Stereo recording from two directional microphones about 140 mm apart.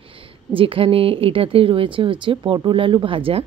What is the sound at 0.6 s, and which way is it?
Speech, 40° right (ahead or behind).